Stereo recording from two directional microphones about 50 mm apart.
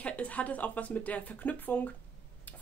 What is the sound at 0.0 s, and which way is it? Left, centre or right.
Speech, left.